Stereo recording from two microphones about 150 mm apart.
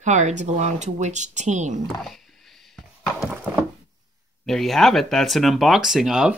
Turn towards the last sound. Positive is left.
turn(degrees=-5)  # may be behind; listen again after turning